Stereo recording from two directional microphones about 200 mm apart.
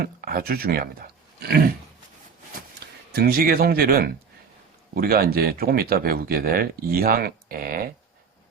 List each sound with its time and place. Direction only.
0.0 s speech: 45° right (ahead or behind)
2.8 s speech: 55° right (ahead or behind)